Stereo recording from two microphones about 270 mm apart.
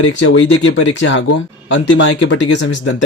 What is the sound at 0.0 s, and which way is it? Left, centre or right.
Speech, left.